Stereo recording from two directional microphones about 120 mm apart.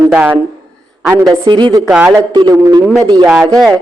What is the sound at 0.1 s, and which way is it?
Speech, 10° right (ahead or behind).